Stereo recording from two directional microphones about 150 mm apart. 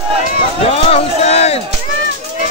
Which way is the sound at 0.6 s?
45° left (ahead or behind).